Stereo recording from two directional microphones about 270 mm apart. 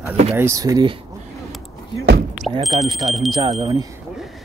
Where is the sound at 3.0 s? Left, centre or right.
Centre.